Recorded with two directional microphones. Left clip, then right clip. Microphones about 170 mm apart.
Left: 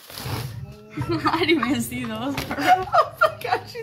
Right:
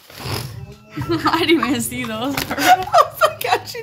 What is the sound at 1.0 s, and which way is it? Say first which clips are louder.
A woman's voice: right 4 dB; 15° right (ahead or behind).